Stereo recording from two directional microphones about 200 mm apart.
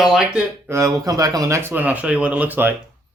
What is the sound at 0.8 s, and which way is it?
Speech, 20° right (ahead or behind).